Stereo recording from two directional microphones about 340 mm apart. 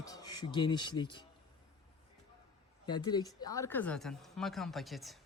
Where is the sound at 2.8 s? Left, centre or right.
Centre.